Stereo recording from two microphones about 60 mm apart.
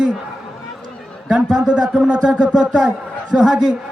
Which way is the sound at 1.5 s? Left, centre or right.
Centre.